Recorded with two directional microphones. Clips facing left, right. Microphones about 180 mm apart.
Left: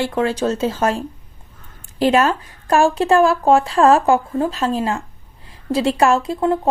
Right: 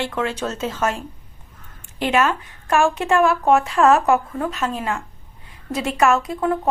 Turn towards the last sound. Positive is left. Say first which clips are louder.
# left 2 dB
turn(degrees=30)  # may be behind; listen again after turning